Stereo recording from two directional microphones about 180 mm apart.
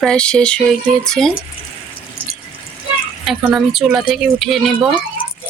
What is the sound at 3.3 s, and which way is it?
Speech, centre (ahead or behind).